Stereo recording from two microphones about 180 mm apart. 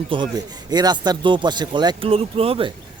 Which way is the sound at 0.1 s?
25° right (ahead or behind).